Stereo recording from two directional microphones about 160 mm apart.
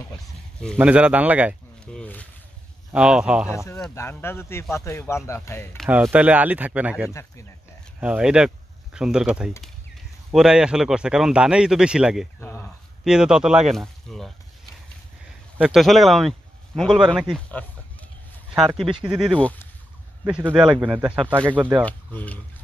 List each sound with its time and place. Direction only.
0.7 s speech: 10° right (ahead or behind)
1.9 s speech: 5° left (ahead or behind)
2.9 s speech: 5° right (ahead or behind)
3.5 s speech: 20° left (ahead or behind)
5.9 s speech: 10° right (ahead or behind)
7.1 s speech: 20° left (ahead or behind)
8.0 s speech: 5° right (ahead or behind)
12.4 s a sound: 15° left (ahead or behind)
13.0 s speech: 5° right (ahead or behind)
15.5 s speech: 5° right (ahead or behind)
19.0 s speech: 5° right (ahead or behind)
20.5 s speech: 5° right (ahead or behind)
21.8 s speech: 10° left (ahead or behind)